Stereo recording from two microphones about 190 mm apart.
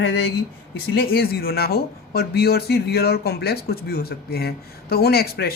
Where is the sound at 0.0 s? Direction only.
70° left (ahead or behind).